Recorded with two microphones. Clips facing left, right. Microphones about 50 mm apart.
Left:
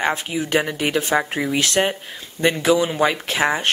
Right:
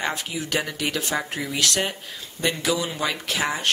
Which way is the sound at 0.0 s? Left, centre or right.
Left.